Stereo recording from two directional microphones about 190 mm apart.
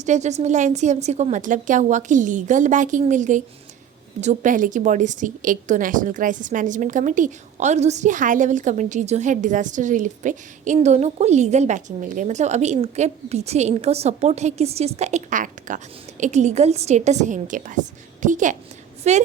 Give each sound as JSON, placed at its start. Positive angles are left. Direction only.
{"t": 0.0, "sound": "a woman's voice", "side_deg": -35}